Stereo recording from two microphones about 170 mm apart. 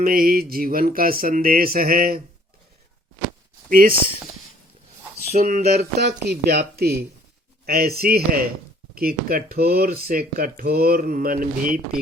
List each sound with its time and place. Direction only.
0.0 s speech: 60° right (ahead or behind)
3.7 s speech: 60° right (ahead or behind)
5.3 s speech: 45° right (ahead or behind)